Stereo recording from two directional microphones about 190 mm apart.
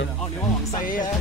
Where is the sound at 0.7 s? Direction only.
45° left (ahead or behind).